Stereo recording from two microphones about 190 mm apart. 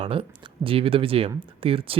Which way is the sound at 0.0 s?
30° right (ahead or behind).